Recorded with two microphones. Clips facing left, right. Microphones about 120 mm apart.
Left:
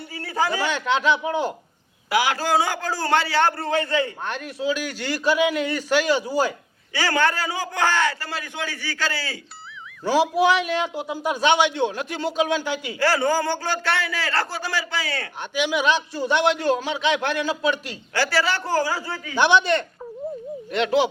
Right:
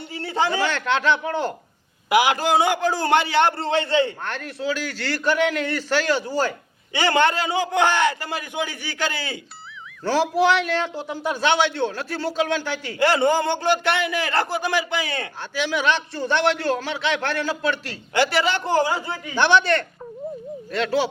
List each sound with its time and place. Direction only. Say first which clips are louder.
0.1 s a sound: right 1 dB; 25° right (ahead or behind)
0.6 s a man's voice: even; 15° left (ahead or behind)
2.0 s a man's voice: right 3 dB; 15° right (ahead or behind)
4.3 s a man's voice: left 1 dB; 15° left (ahead or behind)
6.9 s a man's voice: right 3 dB; 20° right (ahead or behind)
10.0 s a man's voice: even; 10° left (ahead or behind)
13.0 s a man's voice: right 3 dB; 20° right (ahead or behind)
15.5 s a man's voice: left 1 dB; 15° left (ahead or behind)
18.1 s a man's voice: right 2 dB; 20° right (ahead or behind)
19.4 s a man's voice: even; 15° left (ahead or behind)